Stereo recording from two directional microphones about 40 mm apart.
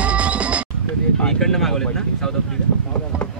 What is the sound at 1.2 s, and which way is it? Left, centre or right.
Speech, centre.